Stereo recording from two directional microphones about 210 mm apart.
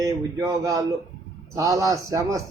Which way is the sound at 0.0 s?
15° right (ahead or behind).